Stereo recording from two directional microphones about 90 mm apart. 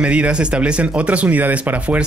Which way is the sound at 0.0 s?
10° right (ahead or behind).